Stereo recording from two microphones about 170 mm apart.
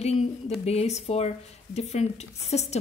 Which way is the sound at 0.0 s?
40° left (ahead or behind).